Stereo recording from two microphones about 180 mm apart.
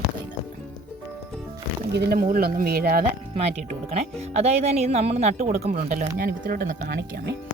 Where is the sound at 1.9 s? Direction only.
65° right (ahead or behind).